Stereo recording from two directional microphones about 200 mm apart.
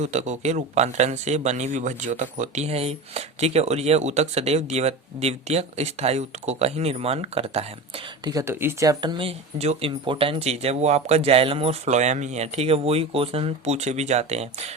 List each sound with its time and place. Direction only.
0.0 s a man's voice: 35° right (ahead or behind)